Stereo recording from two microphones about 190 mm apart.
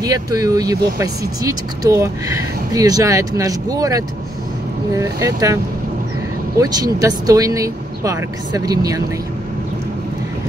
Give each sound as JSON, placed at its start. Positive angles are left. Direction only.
{"t": 0.0, "sound": "speech", "side_deg": -20}
{"t": 6.6, "sound": "speech", "side_deg": -20}